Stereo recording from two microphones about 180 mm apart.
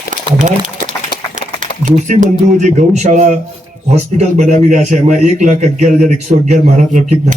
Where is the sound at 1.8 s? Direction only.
45° right (ahead or behind).